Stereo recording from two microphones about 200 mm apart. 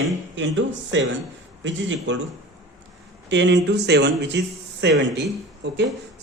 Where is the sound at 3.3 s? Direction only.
60° right (ahead or behind).